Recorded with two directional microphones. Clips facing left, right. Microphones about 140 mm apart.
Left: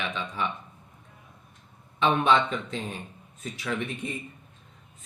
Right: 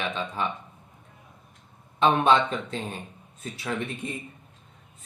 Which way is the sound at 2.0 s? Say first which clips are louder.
Right 2 dB; 40° right (ahead or behind).